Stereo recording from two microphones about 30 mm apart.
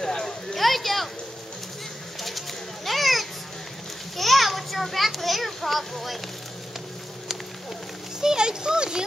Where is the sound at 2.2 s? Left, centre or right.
Centre.